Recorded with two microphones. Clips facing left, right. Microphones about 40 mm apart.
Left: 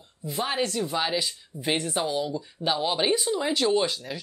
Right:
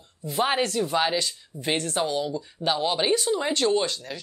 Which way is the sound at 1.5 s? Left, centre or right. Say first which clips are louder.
Even; centre.